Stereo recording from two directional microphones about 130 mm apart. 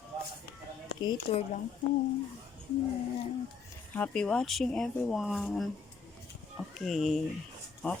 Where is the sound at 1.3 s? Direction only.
55° left (ahead or behind).